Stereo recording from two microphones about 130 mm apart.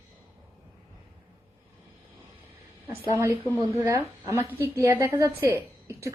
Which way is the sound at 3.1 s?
20° right (ahead or behind).